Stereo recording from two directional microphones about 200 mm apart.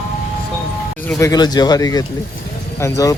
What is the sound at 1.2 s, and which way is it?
Speech, 20° left (ahead or behind).